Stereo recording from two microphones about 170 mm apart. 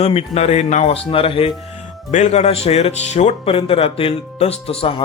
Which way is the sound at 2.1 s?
45° left (ahead or behind).